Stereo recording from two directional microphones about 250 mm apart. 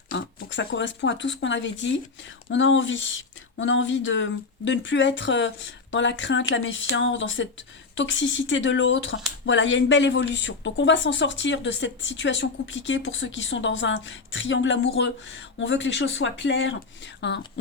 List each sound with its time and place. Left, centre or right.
0.3 s speech: left